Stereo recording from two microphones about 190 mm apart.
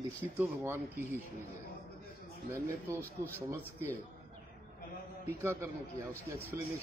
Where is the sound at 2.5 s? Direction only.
15° right (ahead or behind).